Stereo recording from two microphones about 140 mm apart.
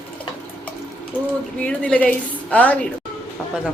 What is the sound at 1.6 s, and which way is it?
A woman's voice, 10° left (ahead or behind).